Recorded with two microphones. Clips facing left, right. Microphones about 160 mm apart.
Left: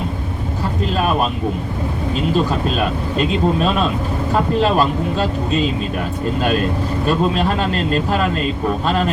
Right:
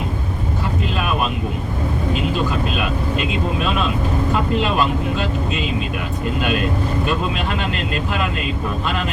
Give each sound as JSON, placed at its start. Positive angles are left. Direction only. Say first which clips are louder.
{"t": 0.9, "sound": "vehicle", "louder": "left 5 dB", "side_deg": 40}
{"t": 2.3, "sound": "speech", "louder": "left 3 dB", "side_deg": 35}
{"t": 7.1, "sound": "speech", "louder": "left 5 dB", "side_deg": 40}